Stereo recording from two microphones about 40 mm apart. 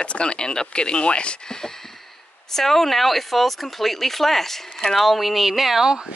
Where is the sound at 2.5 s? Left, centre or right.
Centre.